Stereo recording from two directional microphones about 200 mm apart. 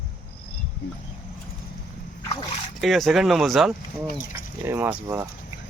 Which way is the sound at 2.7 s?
Centre (ahead or behind).